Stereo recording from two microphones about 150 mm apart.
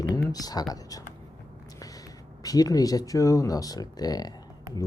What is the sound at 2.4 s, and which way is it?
Speech, 25° left (ahead or behind).